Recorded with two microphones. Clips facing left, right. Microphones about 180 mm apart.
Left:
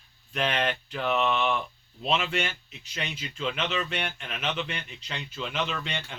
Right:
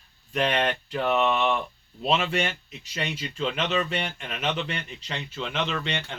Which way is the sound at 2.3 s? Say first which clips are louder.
Right 3 dB; 40° right (ahead or behind).